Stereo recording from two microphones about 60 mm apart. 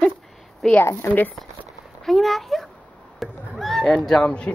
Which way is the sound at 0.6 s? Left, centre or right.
Centre.